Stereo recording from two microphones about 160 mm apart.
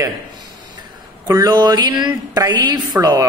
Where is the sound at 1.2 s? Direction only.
20° right (ahead or behind).